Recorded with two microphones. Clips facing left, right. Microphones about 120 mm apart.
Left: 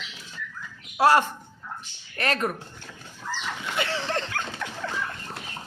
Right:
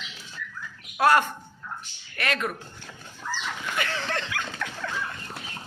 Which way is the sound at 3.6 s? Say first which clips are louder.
Left 2 dB; 25° left (ahead or behind).